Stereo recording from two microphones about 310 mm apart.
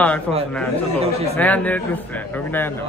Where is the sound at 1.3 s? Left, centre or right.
Centre.